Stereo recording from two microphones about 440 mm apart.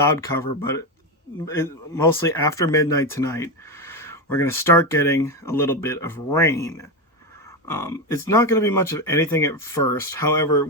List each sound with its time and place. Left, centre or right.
0.0 s speech: centre
2.2 s speech: centre